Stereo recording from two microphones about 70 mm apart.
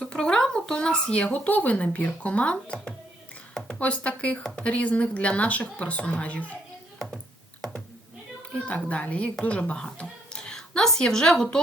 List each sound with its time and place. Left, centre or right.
0.0 s speech: centre
4.7 s speech: left
8.6 s a woman's voice: centre